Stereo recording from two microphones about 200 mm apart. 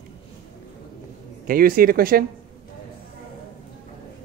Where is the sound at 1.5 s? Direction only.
45° right (ahead or behind).